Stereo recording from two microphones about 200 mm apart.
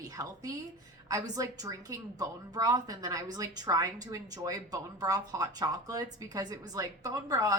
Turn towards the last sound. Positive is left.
turn(degrees=-15)  # may be behind; listen again after turning